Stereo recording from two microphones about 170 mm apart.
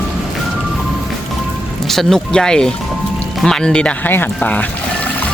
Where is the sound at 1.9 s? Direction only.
Centre (ahead or behind).